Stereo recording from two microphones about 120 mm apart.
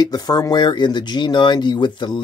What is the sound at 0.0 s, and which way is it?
Speech, 35° left (ahead or behind).